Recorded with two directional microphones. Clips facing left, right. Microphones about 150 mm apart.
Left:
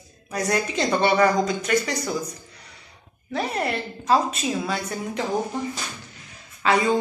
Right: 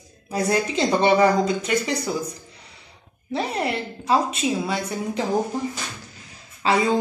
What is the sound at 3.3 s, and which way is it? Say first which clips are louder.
A woman's voice: right 1 dB; 25° right (ahead or behind).